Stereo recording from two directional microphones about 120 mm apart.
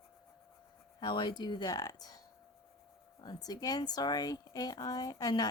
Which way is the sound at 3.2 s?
35° left (ahead or behind).